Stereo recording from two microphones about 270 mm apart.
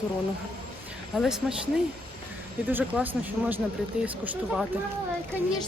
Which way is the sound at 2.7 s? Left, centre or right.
Centre.